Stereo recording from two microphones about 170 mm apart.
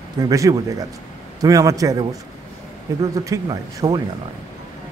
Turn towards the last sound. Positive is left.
turn(degrees=-25)  # may be behind; listen again after turning